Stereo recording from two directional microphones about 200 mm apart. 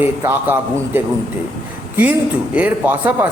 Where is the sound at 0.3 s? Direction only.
10° right (ahead or behind).